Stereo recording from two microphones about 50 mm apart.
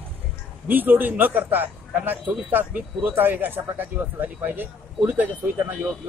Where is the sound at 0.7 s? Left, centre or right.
Right.